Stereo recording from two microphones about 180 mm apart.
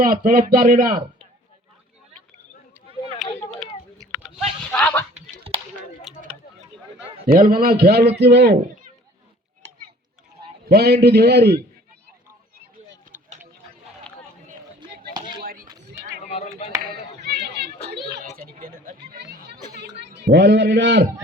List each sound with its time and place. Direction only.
0.0 s speech: 50° right (ahead or behind)
3.2 s a sound: centre (ahead or behind)
4.7 s speech: 5° left (ahead or behind)
7.3 s a man's voice: 55° right (ahead or behind); by 8.5 s 70° right (ahead or behind)
10.7 s a man's voice: 65° right (ahead or behind)
15.4 s a sound: 50° right (ahead or behind)
16.2 s chop: 40° left (ahead or behind)
17.2 s a sound: 65° right (ahead or behind)
18.3 s chatter: 50° right (ahead or behind); by 19.5 s 70° right (ahead or behind)
20.0 s a man's voice: 75° right (ahead or behind)